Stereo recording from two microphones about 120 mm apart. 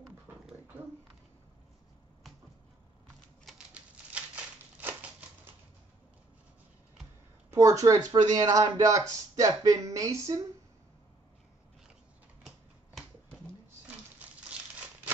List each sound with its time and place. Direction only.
3.4 s typewriter: 10° right (ahead or behind)
7.5 s speech: 25° right (ahead or behind)
12.4 s finger snapping: 5° left (ahead or behind)